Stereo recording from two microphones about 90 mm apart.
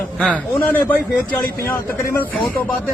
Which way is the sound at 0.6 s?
20° left (ahead or behind).